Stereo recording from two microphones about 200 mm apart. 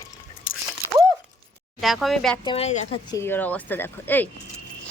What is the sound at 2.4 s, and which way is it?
Speech, 30° left (ahead or behind).